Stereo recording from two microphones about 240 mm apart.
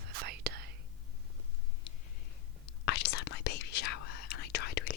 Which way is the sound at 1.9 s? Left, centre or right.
Left.